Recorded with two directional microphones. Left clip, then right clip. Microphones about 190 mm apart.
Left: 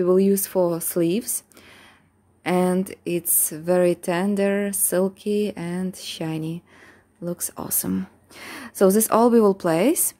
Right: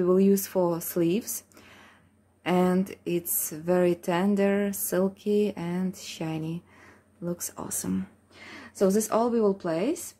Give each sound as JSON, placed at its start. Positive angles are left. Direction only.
{"t": 0.0, "sound": "speech", "side_deg": 25}
{"t": 2.4, "sound": "speech", "side_deg": 25}
{"t": 8.4, "sound": "a woman's voice", "side_deg": 50}